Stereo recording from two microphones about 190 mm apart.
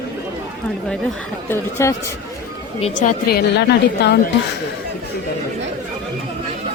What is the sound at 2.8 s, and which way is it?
A woman's voice, 45° left (ahead or behind).